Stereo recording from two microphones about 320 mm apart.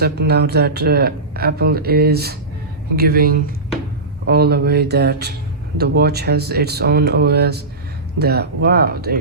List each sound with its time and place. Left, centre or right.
0.0 s speech: right